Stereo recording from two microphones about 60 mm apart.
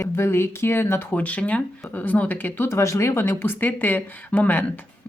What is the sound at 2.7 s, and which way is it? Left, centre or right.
Speech, left.